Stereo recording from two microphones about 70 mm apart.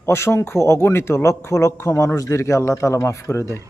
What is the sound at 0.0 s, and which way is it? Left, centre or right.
Speech, left.